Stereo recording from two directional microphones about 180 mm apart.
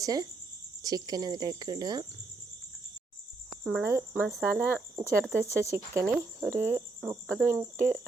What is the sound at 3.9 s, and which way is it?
Speech, 10° right (ahead or behind).